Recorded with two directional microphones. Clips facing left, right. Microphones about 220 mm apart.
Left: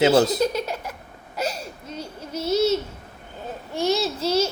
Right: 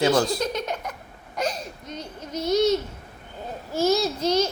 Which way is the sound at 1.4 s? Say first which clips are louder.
Even; 5° left (ahead or behind).